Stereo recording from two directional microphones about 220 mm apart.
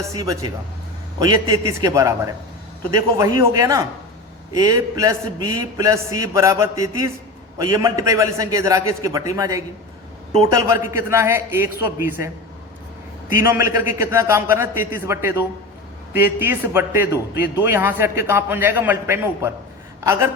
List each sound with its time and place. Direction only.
0.1 s a man's voice: 15° right (ahead or behind)
13.3 s a man's voice: 10° right (ahead or behind)